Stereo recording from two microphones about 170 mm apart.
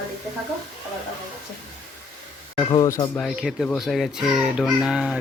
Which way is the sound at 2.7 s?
25° left (ahead or behind).